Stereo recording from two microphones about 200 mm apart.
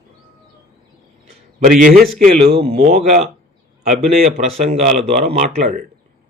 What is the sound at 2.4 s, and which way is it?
Speech, 30° right (ahead or behind).